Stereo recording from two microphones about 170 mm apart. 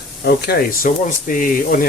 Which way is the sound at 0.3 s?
65° left (ahead or behind).